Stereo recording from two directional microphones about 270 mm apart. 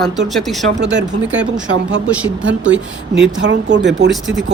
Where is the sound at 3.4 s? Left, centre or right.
Right.